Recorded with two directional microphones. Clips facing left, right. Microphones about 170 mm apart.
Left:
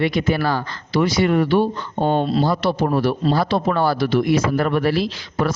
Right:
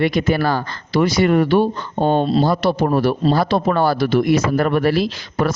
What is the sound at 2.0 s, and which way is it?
Speech, 30° right (ahead or behind).